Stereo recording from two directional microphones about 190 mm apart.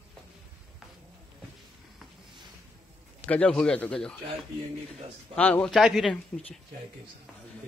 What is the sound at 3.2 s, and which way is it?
Speech, 5° left (ahead or behind).